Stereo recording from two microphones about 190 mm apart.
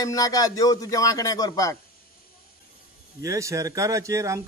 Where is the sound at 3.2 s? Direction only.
15° right (ahead or behind).